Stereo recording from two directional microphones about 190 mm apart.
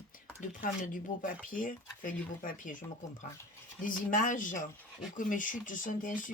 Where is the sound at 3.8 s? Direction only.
45° left (ahead or behind).